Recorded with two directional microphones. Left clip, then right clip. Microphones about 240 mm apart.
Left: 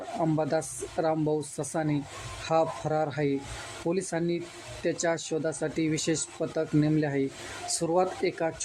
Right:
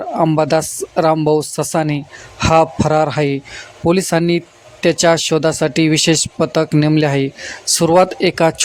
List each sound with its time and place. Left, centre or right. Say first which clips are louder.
0.2 s speech: right 14 dB; right